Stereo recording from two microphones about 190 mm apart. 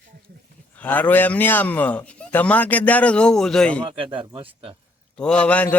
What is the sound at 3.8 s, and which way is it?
Speech, 25° right (ahead or behind).